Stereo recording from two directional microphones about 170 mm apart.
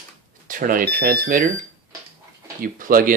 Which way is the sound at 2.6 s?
55° right (ahead or behind).